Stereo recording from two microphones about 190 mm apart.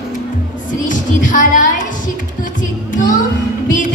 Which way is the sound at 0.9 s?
45° left (ahead or behind).